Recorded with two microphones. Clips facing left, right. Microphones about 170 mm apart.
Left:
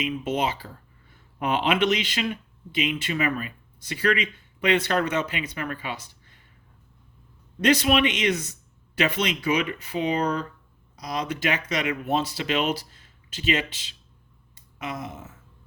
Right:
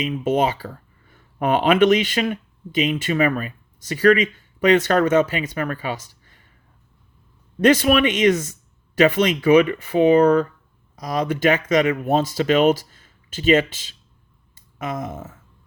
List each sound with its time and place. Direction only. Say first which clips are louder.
0.0 s speech: right 6 dB; 50° right (ahead or behind)
7.6 s speech: right 5 dB; 50° right (ahead or behind)
14.5 s a sound: right 6 dB; 50° right (ahead or behind)